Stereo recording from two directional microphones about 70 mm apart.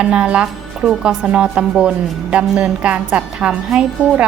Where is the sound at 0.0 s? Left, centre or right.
Centre.